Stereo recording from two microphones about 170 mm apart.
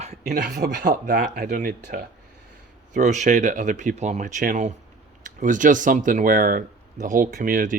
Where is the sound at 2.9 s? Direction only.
45° right (ahead or behind).